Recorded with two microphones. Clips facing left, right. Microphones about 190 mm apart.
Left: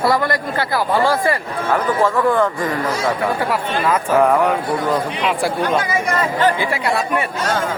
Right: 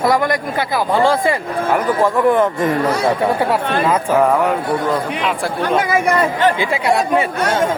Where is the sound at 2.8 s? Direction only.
60° right (ahead or behind).